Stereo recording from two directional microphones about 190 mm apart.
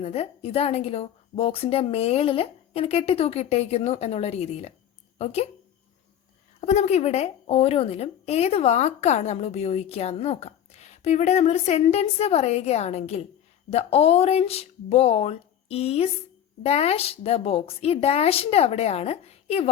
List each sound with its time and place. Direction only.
0.0 s a woman's voice: 30° left (ahead or behind)
6.7 s a woman's voice: 35° left (ahead or behind)